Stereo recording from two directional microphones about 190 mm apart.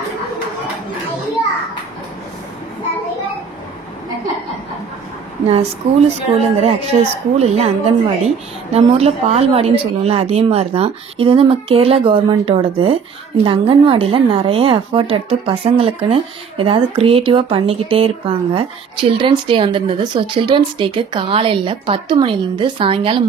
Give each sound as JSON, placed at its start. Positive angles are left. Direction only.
{"t": 6.4, "sound": "a woman's voice", "side_deg": -35}